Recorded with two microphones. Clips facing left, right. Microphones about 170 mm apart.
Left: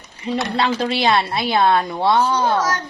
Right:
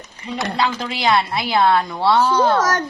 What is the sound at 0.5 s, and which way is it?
Speech, 30° left (ahead or behind).